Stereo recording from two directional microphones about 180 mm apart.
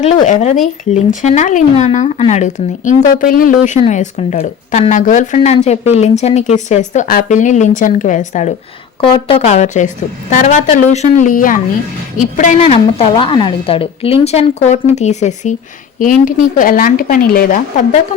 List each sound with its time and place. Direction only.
0.0 s speech: 40° left (ahead or behind)
9.0 s speech: 30° left (ahead or behind); by 17.6 s 55° left (ahead or behind)